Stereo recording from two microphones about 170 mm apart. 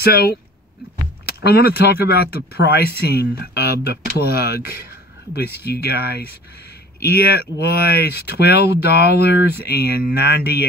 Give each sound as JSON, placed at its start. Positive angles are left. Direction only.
{"t": 0.0, "sound": "speech", "side_deg": 65}